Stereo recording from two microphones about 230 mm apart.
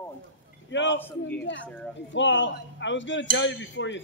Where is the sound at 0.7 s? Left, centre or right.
Left.